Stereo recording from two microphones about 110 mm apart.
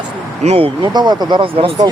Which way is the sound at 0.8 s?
40° right (ahead or behind).